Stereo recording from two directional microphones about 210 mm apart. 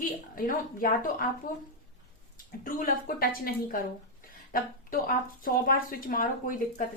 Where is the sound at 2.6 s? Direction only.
40° left (ahead or behind).